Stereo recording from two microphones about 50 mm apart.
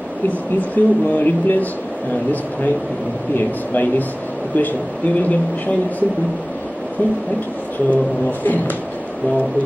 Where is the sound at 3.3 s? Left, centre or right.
Left.